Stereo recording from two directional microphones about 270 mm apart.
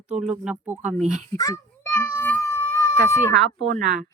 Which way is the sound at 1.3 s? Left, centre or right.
Centre.